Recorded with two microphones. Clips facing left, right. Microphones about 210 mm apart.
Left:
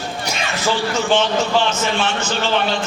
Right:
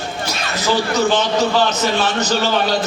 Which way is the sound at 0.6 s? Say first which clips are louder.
Right 4 dB; 40° right (ahead or behind).